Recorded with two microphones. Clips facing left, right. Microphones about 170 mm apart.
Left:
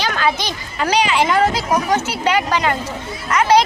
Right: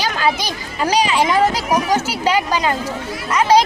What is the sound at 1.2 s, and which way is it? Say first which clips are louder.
Speech: even; 15° right (ahead or behind).